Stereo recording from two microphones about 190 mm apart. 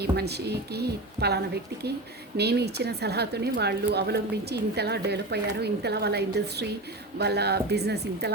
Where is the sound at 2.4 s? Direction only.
60° right (ahead or behind).